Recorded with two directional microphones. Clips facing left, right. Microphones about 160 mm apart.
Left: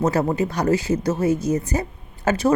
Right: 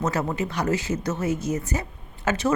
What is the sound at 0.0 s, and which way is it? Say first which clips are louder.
A woman's voice: left 5 dB; 35° left (ahead or behind).